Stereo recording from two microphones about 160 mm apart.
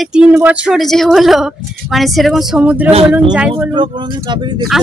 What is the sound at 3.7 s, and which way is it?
Speech, 30° right (ahead or behind).